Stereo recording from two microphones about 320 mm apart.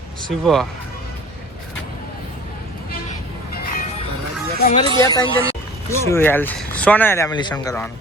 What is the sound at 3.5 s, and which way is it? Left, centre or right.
Music, left.